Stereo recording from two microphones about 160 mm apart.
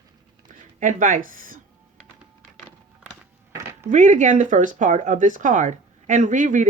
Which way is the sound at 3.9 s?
50° right (ahead or behind).